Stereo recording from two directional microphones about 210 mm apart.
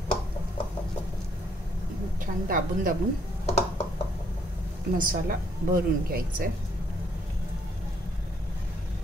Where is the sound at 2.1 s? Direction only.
40° right (ahead or behind).